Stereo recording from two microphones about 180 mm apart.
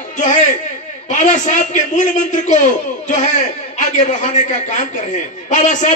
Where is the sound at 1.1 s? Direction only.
40° left (ahead or behind).